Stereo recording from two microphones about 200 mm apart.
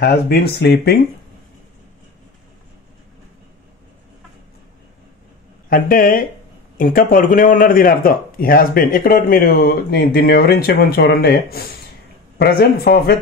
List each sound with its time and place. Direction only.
0.0 s speech: 50° left (ahead or behind)
5.7 s speech: 45° left (ahead or behind)